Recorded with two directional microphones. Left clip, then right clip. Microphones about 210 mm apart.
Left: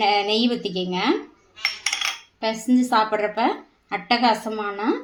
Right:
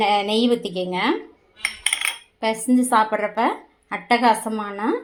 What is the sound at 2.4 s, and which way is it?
A woman's voice, 15° right (ahead or behind).